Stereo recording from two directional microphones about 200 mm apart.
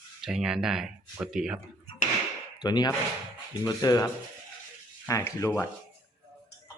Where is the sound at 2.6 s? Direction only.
20° left (ahead or behind).